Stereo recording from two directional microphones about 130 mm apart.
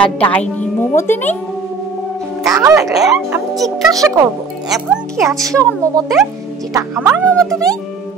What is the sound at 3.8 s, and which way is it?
Speech, 25° right (ahead or behind).